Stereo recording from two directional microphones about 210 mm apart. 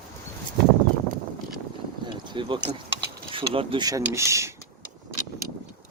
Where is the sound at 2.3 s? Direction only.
25° right (ahead or behind).